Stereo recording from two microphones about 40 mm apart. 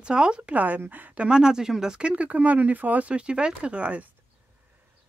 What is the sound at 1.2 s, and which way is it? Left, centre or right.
Speech, right.